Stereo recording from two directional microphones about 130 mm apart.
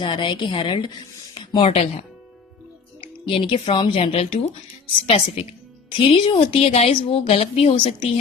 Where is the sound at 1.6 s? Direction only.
55° left (ahead or behind).